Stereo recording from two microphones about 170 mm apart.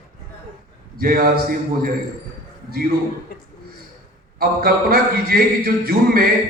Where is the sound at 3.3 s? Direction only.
60° left (ahead or behind).